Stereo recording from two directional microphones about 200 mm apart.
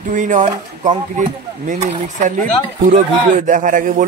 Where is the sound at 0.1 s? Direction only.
40° right (ahead or behind).